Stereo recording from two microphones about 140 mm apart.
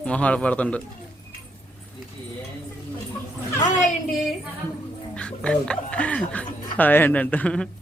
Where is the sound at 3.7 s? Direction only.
65° left (ahead or behind).